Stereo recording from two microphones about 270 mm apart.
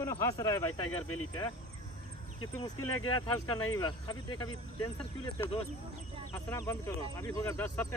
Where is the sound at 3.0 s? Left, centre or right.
Centre.